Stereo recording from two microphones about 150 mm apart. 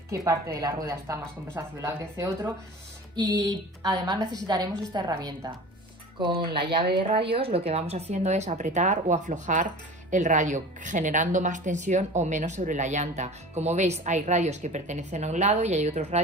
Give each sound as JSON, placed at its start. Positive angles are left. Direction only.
{"t": 0.1, "sound": "a woman's voice", "side_deg": -20}